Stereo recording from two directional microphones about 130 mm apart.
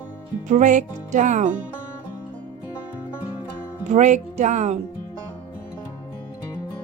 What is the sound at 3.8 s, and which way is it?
Speech, 65° right (ahead or behind).